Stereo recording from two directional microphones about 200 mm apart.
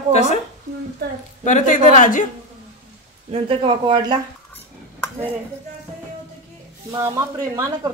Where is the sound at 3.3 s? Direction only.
25° right (ahead or behind).